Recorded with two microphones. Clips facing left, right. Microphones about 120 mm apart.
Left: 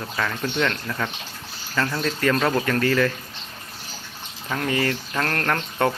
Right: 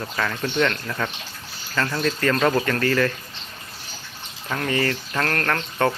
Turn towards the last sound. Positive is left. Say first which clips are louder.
# even
turn(degrees=5)  # may be behind; listen again after turning